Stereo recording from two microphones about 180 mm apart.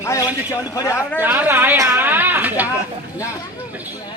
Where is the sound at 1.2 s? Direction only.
10° right (ahead or behind).